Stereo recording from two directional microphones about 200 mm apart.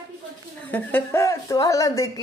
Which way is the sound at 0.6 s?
10° left (ahead or behind).